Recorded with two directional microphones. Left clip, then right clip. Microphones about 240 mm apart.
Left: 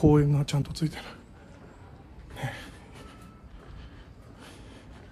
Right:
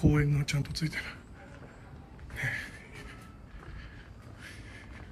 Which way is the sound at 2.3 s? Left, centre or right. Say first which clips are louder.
Right 4 dB; centre.